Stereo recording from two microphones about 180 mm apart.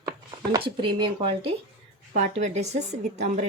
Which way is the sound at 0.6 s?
25° right (ahead or behind).